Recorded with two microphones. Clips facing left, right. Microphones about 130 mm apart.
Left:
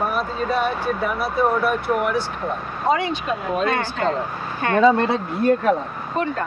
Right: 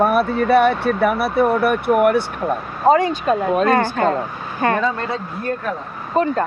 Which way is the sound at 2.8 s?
40° right (ahead or behind).